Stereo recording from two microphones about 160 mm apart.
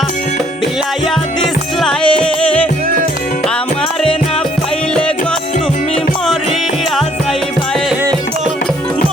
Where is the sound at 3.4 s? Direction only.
5° left (ahead or behind).